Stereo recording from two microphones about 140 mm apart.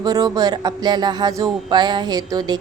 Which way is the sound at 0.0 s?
30° right (ahead or behind).